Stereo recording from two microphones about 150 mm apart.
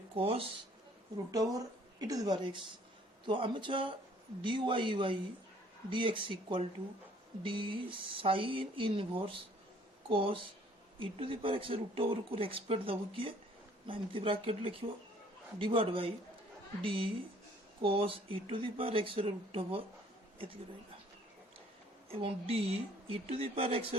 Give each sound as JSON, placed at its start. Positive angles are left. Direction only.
{"t": 0.1, "sound": "speech", "side_deg": -40}
{"t": 1.3, "sound": "speech", "side_deg": -25}
{"t": 22.1, "sound": "speech", "side_deg": -40}